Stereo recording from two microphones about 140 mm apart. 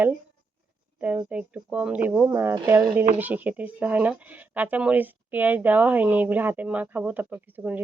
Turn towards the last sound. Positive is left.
turn(degrees=-15)  # may be behind; listen again after turning